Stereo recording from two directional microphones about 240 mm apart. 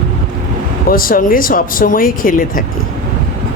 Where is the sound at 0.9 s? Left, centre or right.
Left.